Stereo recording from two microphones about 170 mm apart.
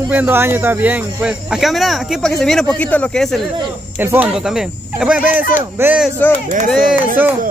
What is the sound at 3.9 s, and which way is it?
Speech, 10° right (ahead or behind).